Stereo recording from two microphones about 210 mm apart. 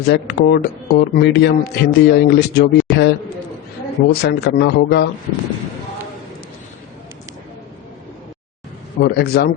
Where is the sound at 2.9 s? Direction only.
Centre (ahead or behind).